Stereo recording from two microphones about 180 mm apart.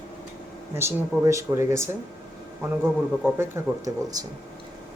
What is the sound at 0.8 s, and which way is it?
Speech, 15° right (ahead or behind).